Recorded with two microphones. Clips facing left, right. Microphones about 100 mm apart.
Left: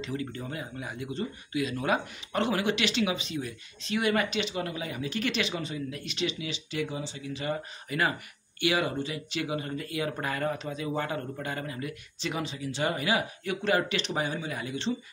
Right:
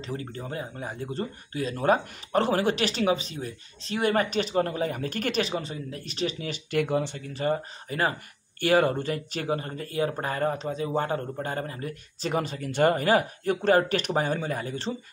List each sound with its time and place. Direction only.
0.0 s speech: 35° right (ahead or behind)